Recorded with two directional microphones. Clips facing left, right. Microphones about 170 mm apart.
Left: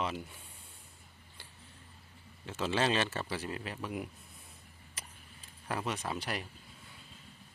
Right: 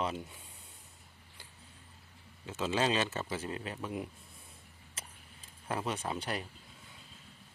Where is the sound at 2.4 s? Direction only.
20° right (ahead or behind).